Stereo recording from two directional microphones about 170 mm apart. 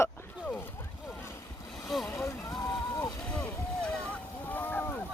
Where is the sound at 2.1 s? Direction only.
15° left (ahead or behind).